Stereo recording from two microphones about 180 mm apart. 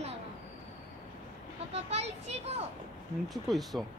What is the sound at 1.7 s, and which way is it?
Speech, 35° right (ahead or behind).